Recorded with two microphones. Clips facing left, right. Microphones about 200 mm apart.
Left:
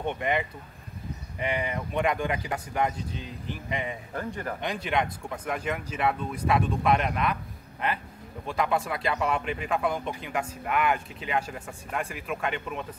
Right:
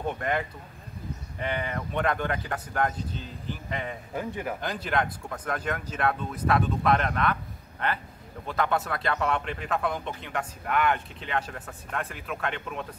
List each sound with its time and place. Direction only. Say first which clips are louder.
0.2 s speech: left 1 dB; 5° left (ahead or behind)
4.1 s speech: right 1 dB; 10° right (ahead or behind)
5.3 s speech: even; 10° left (ahead or behind)
8.5 s speech: even; centre (ahead or behind)